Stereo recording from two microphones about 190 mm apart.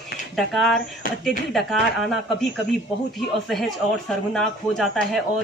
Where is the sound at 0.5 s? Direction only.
Centre (ahead or behind).